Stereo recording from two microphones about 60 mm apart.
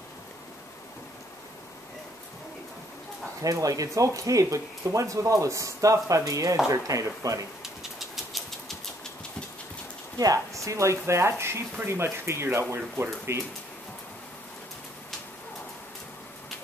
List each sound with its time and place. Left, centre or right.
3.4 s speech: right
7.6 s a sound: centre
10.1 s speech: right